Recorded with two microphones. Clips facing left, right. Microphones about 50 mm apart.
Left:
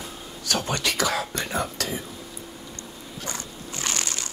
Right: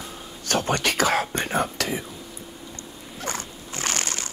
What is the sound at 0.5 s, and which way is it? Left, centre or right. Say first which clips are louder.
Speech: right 3 dB; right.